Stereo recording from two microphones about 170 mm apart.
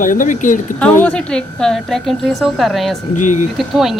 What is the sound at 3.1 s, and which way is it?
Speech, 45° left (ahead or behind).